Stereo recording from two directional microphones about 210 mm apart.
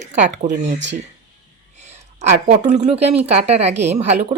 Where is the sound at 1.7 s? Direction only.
35° right (ahead or behind).